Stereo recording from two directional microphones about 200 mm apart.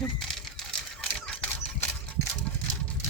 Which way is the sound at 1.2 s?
5° left (ahead or behind).